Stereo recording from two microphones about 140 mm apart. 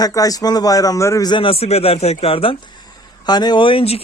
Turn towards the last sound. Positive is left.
turn(degrees=40)  # may be behind; listen again after turning